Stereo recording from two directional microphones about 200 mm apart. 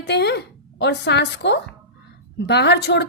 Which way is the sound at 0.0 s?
55° left (ahead or behind).